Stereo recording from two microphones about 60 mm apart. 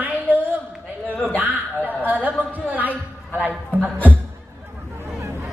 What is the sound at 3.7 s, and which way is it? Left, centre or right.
Beatboxing, right.